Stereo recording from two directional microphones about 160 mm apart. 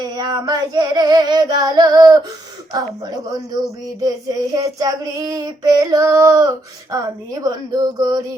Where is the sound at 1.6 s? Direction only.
25° right (ahead or behind).